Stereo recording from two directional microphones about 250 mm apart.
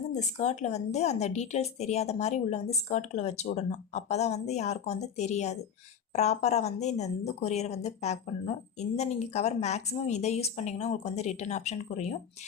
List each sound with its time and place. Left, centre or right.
0.1 s speech: left